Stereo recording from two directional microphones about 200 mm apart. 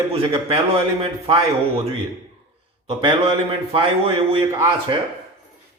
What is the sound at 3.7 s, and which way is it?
Speech, 30° right (ahead or behind).